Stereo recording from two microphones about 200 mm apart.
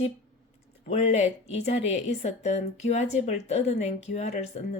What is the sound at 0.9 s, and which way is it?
Speech, 30° left (ahead or behind).